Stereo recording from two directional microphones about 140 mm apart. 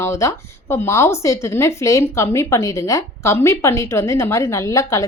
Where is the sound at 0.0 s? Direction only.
20° left (ahead or behind).